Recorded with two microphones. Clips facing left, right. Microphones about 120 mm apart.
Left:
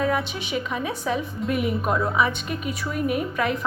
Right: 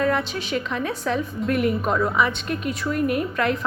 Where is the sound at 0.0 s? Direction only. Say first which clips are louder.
Right 2 dB; 5° left (ahead or behind).